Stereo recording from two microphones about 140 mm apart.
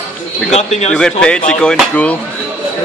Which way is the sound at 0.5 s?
55° left (ahead or behind).